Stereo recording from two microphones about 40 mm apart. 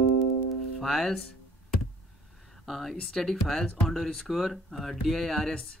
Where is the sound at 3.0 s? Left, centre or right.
Centre.